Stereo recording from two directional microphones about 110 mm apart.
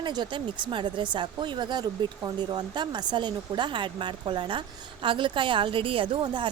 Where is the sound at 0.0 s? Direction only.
40° right (ahead or behind).